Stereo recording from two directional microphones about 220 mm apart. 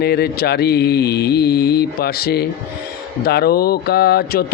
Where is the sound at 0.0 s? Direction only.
45° left (ahead or behind).